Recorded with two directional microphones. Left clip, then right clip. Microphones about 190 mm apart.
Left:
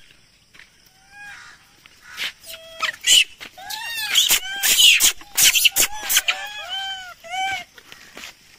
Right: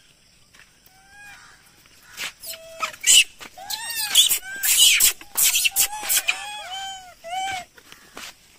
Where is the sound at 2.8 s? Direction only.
45° right (ahead or behind).